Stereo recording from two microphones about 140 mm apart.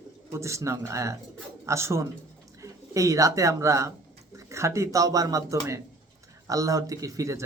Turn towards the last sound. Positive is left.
turn(degrees=-25)  # may be behind; listen again after turning